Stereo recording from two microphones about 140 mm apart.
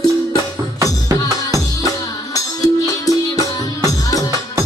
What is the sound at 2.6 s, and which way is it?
Music, 25° left (ahead or behind).